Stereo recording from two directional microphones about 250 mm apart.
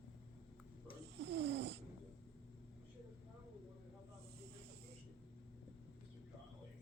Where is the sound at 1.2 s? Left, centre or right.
Right.